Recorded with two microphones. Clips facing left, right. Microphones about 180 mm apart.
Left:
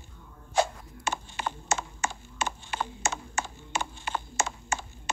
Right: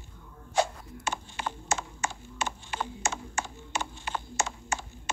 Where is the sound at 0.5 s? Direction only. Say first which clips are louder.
Left 1 dB; 50° left (ahead or behind).